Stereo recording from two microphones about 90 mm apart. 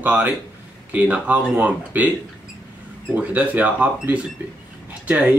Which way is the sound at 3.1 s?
15° right (ahead or behind).